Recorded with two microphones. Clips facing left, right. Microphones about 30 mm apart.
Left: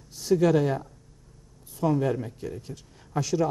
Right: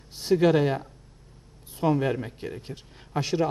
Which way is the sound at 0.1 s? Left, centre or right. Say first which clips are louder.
Right 1 dB; right.